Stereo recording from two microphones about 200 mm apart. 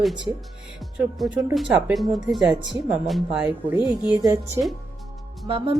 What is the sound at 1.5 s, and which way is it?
Speech, centre (ahead or behind).